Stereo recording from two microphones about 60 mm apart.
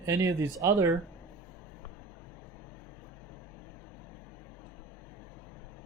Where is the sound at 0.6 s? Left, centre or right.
Right.